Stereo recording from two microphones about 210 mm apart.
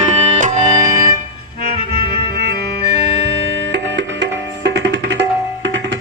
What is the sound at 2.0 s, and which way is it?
Music, 50° right (ahead or behind).